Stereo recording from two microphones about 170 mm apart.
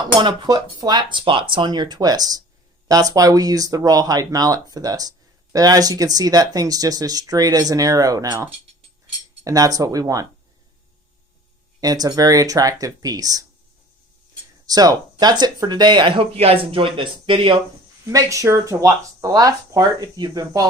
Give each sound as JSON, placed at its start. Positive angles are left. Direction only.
{"t": 0.0, "sound": "speech", "side_deg": -25}
{"t": 11.8, "sound": "speech", "side_deg": -20}
{"t": 14.7, "sound": "speech", "side_deg": -20}
{"t": 18.1, "sound": "speech", "side_deg": -20}